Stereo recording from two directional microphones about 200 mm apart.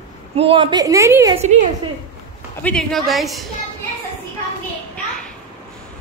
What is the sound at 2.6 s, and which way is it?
Speech, 5° left (ahead or behind).